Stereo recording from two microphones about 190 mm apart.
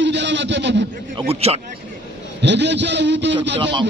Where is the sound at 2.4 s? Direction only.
65° right (ahead or behind).